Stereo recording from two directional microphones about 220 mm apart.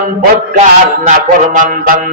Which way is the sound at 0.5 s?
35° right (ahead or behind).